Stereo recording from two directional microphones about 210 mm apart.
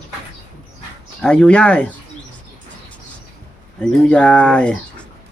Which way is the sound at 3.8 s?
5° left (ahead or behind).